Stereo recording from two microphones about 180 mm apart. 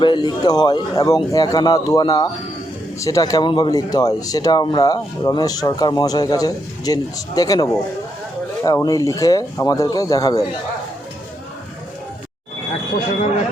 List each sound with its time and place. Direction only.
0.0 s speech: 25° left (ahead or behind)